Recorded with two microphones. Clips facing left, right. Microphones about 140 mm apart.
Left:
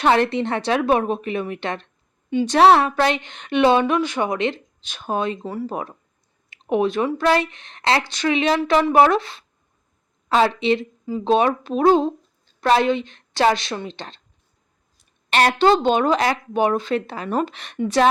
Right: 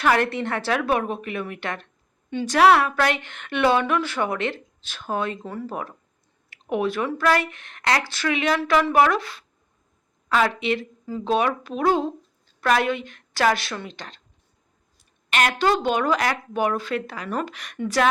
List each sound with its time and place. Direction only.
0.0 s a woman's voice: 25° left (ahead or behind)
15.3 s a woman's voice: 35° left (ahead or behind)